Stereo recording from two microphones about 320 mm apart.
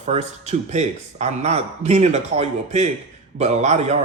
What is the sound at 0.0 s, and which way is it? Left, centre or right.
A man's voice, right.